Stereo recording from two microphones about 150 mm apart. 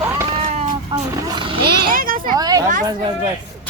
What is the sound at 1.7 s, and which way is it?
Speech, 70° right (ahead or behind).